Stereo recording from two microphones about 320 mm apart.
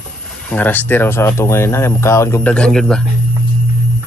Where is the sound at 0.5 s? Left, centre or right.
Centre.